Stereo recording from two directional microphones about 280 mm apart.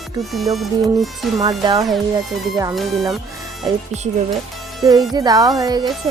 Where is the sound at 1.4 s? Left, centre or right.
Centre.